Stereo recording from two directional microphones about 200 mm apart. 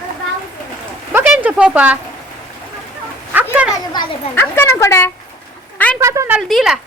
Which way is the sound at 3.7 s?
20° left (ahead or behind).